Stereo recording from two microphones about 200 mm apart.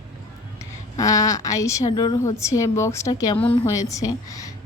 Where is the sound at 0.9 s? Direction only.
15° left (ahead or behind).